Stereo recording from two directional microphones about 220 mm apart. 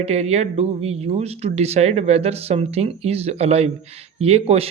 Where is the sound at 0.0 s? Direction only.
30° right (ahead or behind).